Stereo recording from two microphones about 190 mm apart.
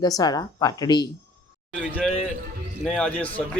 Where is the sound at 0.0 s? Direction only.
20° left (ahead or behind).